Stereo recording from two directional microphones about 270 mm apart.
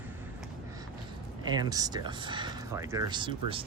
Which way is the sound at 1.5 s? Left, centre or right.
Centre.